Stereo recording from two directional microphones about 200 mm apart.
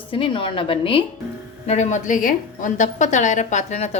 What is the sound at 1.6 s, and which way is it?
A woman's voice, 35° left (ahead or behind).